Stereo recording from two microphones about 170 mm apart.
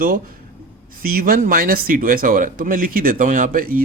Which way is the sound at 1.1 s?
60° right (ahead or behind).